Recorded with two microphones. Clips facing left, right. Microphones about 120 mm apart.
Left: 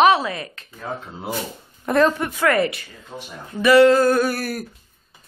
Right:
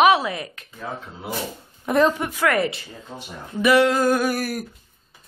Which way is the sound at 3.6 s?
15° right (ahead or behind).